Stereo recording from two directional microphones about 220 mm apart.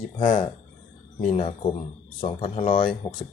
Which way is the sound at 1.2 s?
25° left (ahead or behind).